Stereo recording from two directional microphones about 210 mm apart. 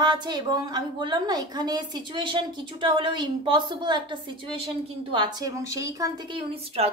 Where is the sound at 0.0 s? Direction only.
20° right (ahead or behind).